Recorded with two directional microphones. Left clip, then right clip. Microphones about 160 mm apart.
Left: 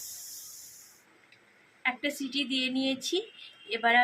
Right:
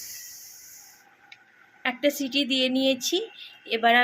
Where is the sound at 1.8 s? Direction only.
90° right.